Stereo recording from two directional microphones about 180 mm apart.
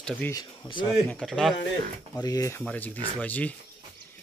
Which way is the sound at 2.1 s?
20° left (ahead or behind).